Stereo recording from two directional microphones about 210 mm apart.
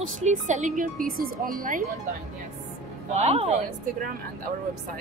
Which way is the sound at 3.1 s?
30° right (ahead or behind).